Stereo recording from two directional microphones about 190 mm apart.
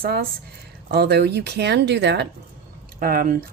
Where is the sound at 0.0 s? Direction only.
55° right (ahead or behind).